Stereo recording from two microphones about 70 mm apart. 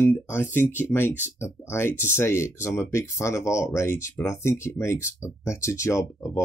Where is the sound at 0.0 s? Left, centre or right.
Left.